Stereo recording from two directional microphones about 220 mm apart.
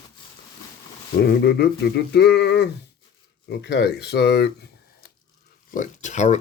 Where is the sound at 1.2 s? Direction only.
45° left (ahead or behind).